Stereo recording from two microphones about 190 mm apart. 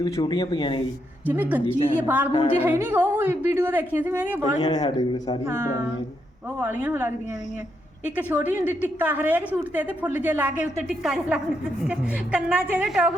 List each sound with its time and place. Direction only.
0.0 s speech: 20° left (ahead or behind)
1.3 s a woman's voice: 10° right (ahead or behind)
2.3 s a woman's voice: 30° left (ahead or behind)
2.6 s a woman's voice: 10° right (ahead or behind)
4.6 s speech: 20° left (ahead or behind)
6.6 s a woman's voice: 10° right (ahead or behind)